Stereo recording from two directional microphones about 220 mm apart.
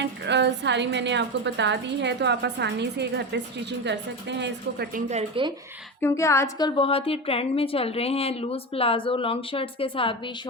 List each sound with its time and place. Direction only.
0.0 s a woman's voice: 50° right (ahead or behind)
4.9 s speech: 30° right (ahead or behind)
6.0 s a woman's voice: 10° left (ahead or behind)